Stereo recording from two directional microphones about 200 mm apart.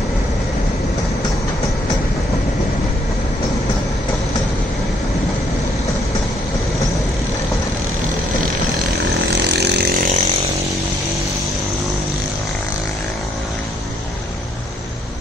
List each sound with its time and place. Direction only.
9.6 s chainsaw: 55° right (ahead or behind)